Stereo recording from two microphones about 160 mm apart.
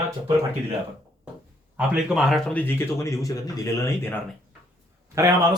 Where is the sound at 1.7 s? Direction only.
5° right (ahead or behind); by 4.1 s 20° left (ahead or behind).